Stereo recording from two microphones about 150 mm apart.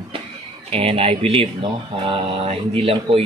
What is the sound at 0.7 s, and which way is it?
Speech, 40° right (ahead or behind).